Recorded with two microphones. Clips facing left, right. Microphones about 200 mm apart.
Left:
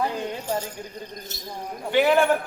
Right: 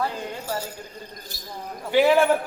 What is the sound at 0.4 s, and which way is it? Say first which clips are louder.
Speech: left 1 dB; 10° right (ahead or behind).